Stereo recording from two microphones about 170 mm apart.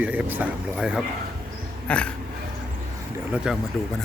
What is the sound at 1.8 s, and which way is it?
Speech, 5° left (ahead or behind).